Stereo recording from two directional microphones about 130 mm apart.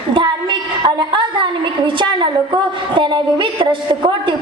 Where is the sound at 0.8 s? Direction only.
40° right (ahead or behind).